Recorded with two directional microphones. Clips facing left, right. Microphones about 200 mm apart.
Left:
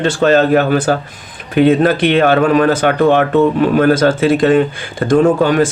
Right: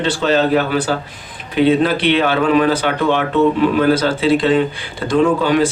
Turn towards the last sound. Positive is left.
turn(degrees=50)  # may be behind; listen again after turning